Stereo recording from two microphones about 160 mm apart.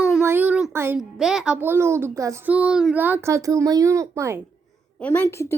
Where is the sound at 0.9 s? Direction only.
5° right (ahead or behind).